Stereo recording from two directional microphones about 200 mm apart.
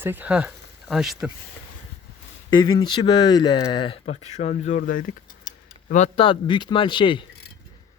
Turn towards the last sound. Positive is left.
turn(degrees=25)  # may be behind; listen again after turning